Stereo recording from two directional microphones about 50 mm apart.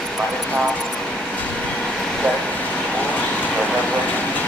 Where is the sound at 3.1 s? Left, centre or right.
Left.